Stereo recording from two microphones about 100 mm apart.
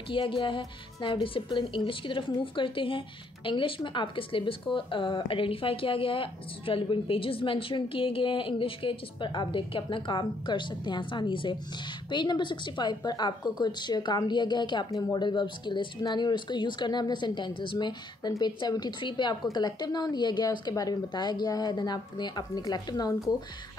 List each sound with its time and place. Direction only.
0.1 s a woman's voice: 55° left (ahead or behind)
14.9 s speech: 40° left (ahead or behind)